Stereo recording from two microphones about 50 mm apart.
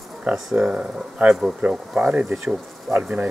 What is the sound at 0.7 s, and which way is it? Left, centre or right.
Speech, centre.